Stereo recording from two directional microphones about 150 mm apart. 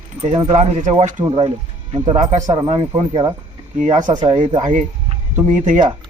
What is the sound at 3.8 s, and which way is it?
Speech, 55° right (ahead or behind).